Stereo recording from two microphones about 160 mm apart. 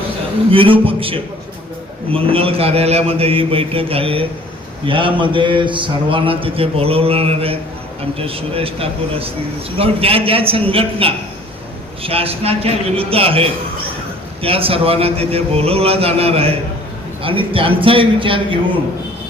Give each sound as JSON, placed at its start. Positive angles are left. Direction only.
{"t": 0.5, "sound": "a man's voice", "side_deg": -35}